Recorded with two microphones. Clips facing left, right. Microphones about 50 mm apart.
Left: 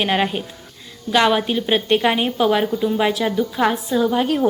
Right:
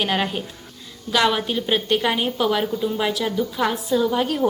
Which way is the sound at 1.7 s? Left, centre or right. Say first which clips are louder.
Left 4 dB; left.